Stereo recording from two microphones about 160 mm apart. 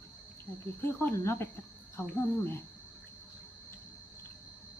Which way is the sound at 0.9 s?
15° left (ahead or behind).